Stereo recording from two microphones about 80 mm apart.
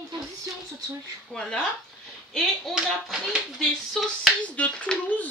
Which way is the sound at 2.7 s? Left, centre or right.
Centre.